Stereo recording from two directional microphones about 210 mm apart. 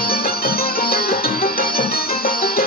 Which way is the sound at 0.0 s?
45° left (ahead or behind).